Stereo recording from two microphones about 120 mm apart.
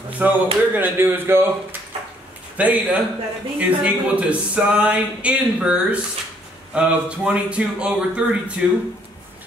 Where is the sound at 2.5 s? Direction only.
10° right (ahead or behind).